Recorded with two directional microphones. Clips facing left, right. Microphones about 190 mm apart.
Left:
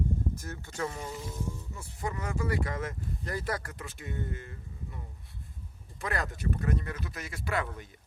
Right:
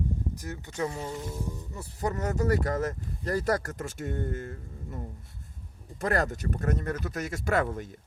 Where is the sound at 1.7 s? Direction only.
40° right (ahead or behind).